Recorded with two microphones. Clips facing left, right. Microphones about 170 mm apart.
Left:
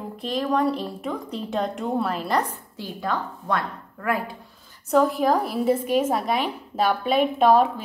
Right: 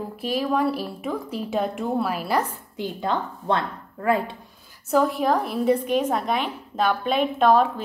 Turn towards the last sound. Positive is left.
turn(degrees=10)  # may be behind; listen again after turning